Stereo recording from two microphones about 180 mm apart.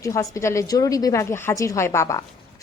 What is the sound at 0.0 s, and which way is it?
A woman's voice, 15° left (ahead or behind).